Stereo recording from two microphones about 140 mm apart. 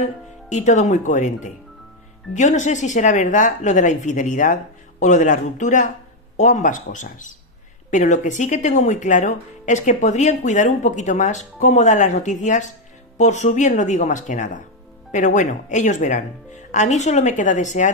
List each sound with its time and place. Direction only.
0.0 s speech: 60° left (ahead or behind)